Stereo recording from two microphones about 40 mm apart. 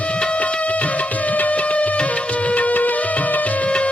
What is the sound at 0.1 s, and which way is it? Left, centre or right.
Music, left.